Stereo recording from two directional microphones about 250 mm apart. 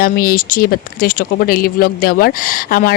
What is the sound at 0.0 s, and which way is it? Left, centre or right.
Speech, left.